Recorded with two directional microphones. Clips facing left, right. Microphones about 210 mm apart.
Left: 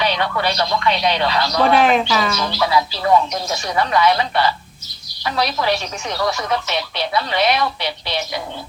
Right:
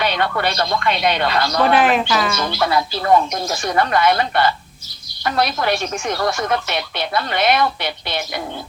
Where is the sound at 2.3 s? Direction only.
50° right (ahead or behind).